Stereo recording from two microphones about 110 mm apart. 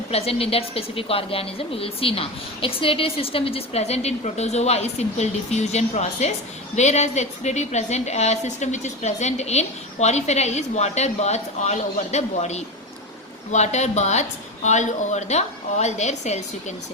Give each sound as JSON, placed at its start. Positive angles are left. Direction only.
{"t": 0.1, "sound": "a woman's voice", "side_deg": 65}